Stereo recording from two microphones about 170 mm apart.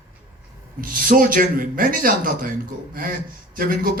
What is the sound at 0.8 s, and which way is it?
A man's voice, 55° right (ahead or behind).